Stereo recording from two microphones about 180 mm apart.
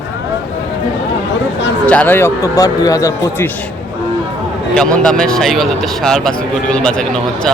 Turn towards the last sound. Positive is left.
turn(degrees=5)  # may be behind; listen again after turning